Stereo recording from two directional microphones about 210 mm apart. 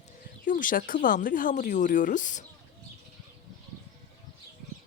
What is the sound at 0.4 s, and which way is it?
Speech, 40° left (ahead or behind).